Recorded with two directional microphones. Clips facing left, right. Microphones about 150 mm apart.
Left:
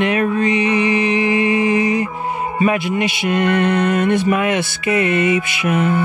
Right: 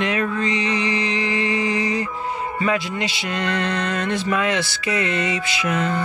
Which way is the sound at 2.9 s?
20° left (ahead or behind).